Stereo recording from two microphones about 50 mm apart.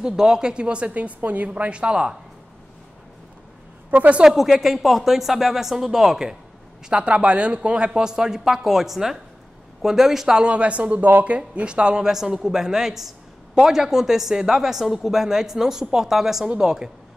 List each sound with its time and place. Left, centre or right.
0.0 s speech: centre
3.9 s a woman's voice: right
4.2 s speech: centre
6.9 s speech: right
10.4 s speech: right